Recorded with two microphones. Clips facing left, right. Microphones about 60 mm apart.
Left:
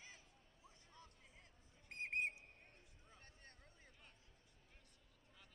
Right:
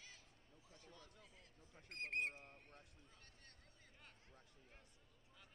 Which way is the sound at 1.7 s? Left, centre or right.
Right.